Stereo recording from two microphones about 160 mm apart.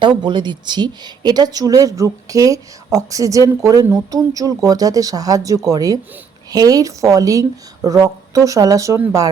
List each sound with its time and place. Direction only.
0.0 s speech: 30° right (ahead or behind)